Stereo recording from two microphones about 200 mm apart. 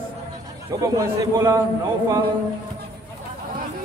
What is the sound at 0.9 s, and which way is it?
Speech, 15° right (ahead or behind).